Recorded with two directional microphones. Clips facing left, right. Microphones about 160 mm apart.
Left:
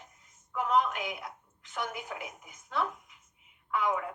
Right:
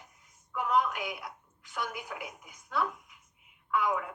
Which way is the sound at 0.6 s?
20° left (ahead or behind).